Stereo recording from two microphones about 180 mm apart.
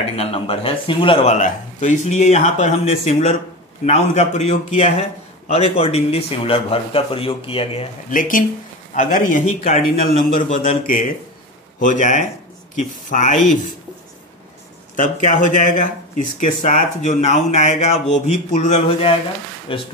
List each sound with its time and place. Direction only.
0.0 s speech: 35° left (ahead or behind)
1.3 s speech: 40° left (ahead or behind)
8.1 s speech: 50° left (ahead or behind)
15.0 s speech: 45° left (ahead or behind)
19.7 s speech: 30° left (ahead or behind)